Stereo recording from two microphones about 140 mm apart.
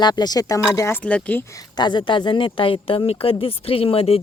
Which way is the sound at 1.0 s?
10° left (ahead or behind).